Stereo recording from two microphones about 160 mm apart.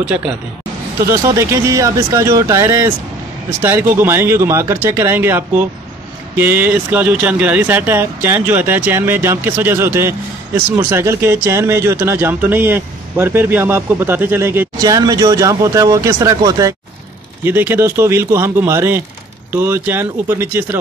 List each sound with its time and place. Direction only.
1.0 s speech: 15° right (ahead or behind)